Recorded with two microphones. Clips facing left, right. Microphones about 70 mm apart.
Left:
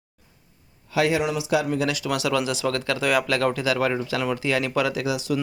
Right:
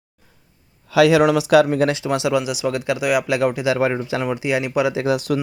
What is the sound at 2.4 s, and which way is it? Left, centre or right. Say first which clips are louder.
Speech: right 2 dB; centre.